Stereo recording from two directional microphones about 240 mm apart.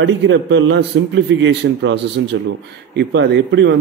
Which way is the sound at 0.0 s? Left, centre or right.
Right.